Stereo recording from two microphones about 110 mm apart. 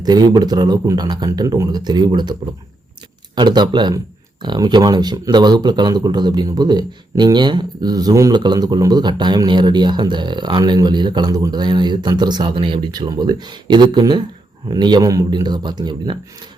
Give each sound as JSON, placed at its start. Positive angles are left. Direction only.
{"t": 0.0, "sound": "speech", "side_deg": -40}